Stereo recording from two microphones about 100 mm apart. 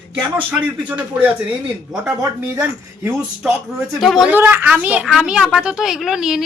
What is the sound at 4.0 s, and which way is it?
Speech, centre (ahead or behind).